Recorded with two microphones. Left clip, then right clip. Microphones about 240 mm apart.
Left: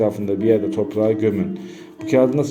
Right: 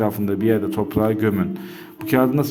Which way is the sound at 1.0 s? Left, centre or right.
Right.